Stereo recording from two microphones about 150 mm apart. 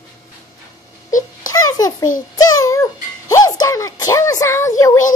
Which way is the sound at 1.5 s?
25° left (ahead or behind).